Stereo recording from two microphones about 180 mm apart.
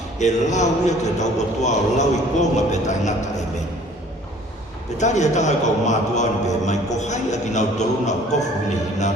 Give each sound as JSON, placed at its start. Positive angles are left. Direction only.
{"t": 0.2, "sound": "a man's voice", "side_deg": 40}
{"t": 4.9, "sound": "a man's voice", "side_deg": 40}